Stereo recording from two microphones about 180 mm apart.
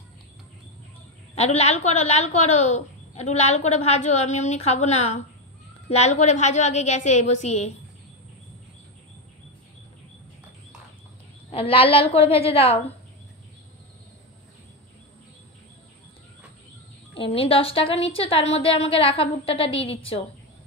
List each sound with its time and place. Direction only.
1.3 s speech: 35° left (ahead or behind)
11.5 s speech: 30° left (ahead or behind)
17.1 s speech: 30° left (ahead or behind)